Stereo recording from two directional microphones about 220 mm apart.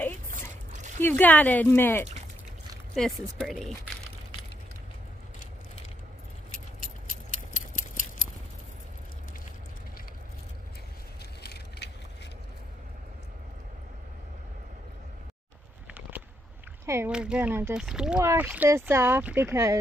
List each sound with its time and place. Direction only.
1.0 s speech: 5° left (ahead or behind)
6.8 s keys jangling: 35° left (ahead or behind)
11.4 s vehicle: 45° left (ahead or behind)
16.8 s speech: 10° right (ahead or behind)